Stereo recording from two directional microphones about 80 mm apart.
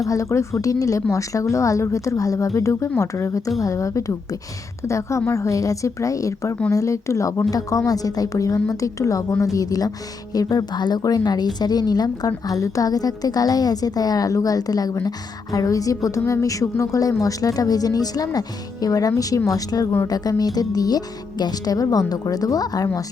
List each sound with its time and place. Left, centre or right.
0.0 s a woman's voice: left